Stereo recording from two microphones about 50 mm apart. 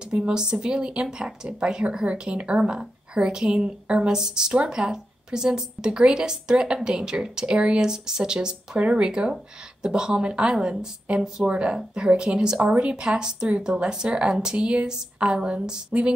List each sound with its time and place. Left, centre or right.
0.1 s speech: centre